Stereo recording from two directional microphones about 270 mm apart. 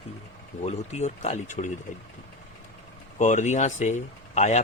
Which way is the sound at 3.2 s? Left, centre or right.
Left.